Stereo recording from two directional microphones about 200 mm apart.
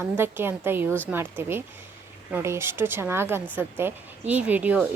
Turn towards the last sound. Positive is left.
turn(degrees=-5)  # may be behind; listen again after turning